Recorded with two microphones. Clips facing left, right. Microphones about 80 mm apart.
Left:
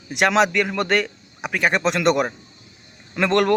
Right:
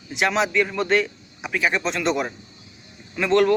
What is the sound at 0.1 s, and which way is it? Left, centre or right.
A man's voice, left.